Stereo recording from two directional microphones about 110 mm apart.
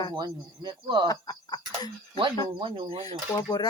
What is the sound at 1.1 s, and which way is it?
Speech, 40° left (ahead or behind).